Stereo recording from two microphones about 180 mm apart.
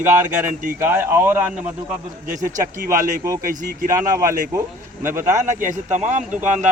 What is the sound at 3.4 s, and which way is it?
Speech, 55° right (ahead or behind).